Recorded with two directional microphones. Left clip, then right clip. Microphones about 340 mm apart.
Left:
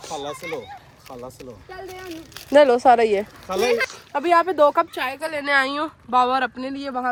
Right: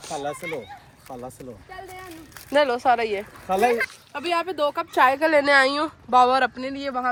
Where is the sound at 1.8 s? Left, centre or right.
Left.